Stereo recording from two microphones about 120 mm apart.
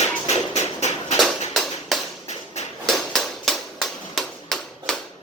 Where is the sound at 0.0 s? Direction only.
65° left (ahead or behind).